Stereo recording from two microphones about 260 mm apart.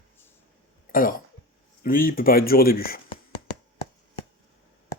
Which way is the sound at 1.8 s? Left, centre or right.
Left.